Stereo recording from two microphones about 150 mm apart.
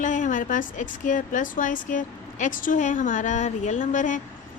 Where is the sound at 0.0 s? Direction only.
55° left (ahead or behind).